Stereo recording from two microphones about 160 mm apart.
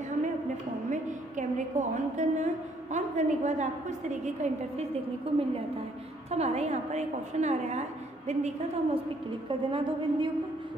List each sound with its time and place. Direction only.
0.8 s a woman's voice: 50° right (ahead or behind)
6.3 s a woman's voice: 40° right (ahead or behind)
9.5 s a woman's voice: 30° right (ahead or behind)